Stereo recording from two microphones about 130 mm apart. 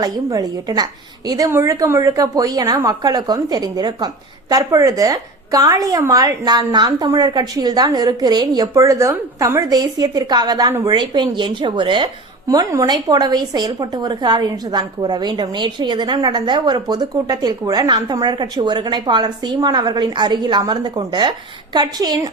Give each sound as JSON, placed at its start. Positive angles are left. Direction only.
{"t": 0.0, "sound": "a woman's voice", "side_deg": -30}